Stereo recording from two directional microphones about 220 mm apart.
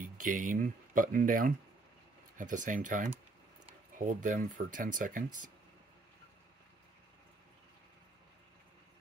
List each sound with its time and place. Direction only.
0.0 s speech: 35° right (ahead or behind)